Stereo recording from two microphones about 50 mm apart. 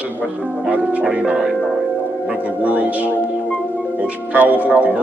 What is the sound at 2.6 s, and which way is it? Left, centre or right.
Speech, right.